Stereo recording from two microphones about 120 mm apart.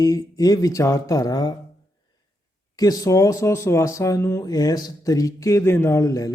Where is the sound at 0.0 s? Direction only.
30° left (ahead or behind).